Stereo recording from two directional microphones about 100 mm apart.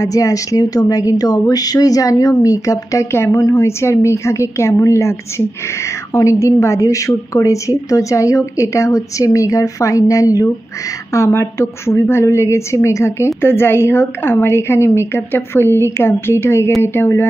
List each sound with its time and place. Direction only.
0.0 s a woman's voice: 35° left (ahead or behind)
6.1 s a woman's voice: 30° left (ahead or behind)